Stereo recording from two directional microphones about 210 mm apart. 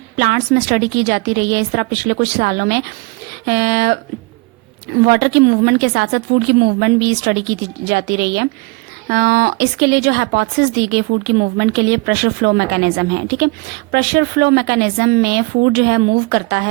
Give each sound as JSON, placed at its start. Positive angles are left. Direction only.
{"t": 0.2, "sound": "speech", "side_deg": -50}